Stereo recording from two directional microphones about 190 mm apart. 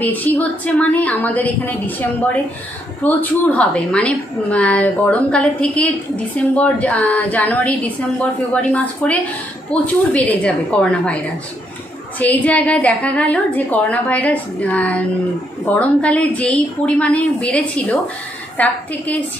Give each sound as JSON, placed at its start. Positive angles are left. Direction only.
{"t": 0.0, "sound": "a woman's voice", "side_deg": 10}